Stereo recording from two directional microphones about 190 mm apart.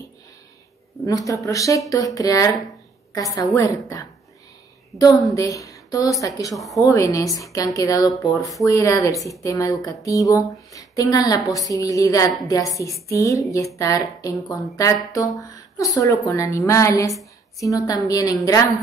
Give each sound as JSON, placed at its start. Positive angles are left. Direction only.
{"t": 1.0, "sound": "speech", "side_deg": 15}
{"t": 1.9, "sound": "a sound", "side_deg": 20}
{"t": 3.1, "sound": "speech", "side_deg": 20}
{"t": 4.9, "sound": "a sound", "side_deg": 20}
{"t": 5.3, "sound": "speech", "side_deg": 20}
{"t": 6.5, "sound": "a woman's voice", "side_deg": 0}
{"t": 6.8, "sound": "speech", "side_deg": 15}